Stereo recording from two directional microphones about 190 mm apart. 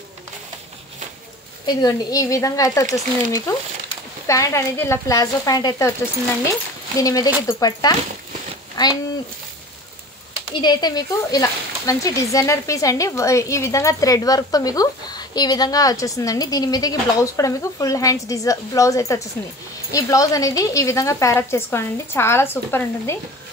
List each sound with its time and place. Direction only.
1.7 s speech: 20° left (ahead or behind)
7.0 s speech: 20° left (ahead or behind)
10.5 s speech: 25° left (ahead or behind)